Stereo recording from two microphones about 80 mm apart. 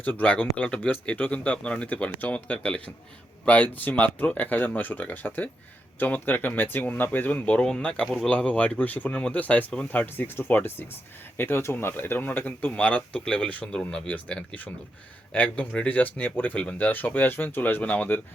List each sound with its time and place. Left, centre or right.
0.0 s speech: centre